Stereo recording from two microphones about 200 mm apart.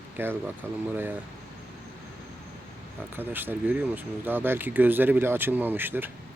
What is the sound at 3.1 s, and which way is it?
Speech, 10° right (ahead or behind).